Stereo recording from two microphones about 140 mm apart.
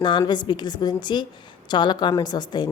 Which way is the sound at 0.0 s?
30° left (ahead or behind).